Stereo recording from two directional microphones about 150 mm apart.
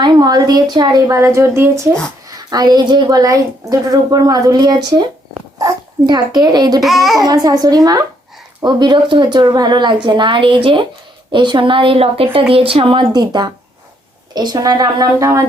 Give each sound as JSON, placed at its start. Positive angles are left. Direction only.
{"t": 0.0, "sound": "a woman's voice", "side_deg": -30}
{"t": 6.8, "sound": "a child's voice", "side_deg": 0}
{"t": 7.2, "sound": "a woman's voice", "side_deg": -25}